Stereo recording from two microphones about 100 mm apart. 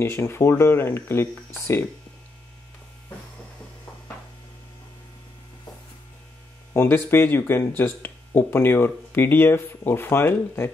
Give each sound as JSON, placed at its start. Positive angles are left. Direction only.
{"t": 0.0, "sound": "speech", "side_deg": 25}
{"t": 6.7, "sound": "speech", "side_deg": 25}